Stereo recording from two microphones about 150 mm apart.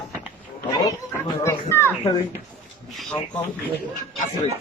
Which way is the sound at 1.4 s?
15° left (ahead or behind).